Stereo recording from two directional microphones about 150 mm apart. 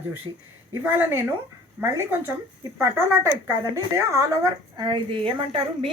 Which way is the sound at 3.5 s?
20° right (ahead or behind).